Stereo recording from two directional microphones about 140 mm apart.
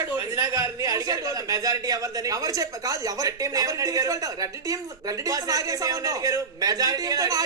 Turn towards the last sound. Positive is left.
turn(degrees=-25)  # may be behind; listen again after turning